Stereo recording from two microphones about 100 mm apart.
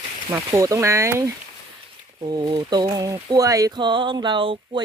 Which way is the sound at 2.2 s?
45° right (ahead or behind).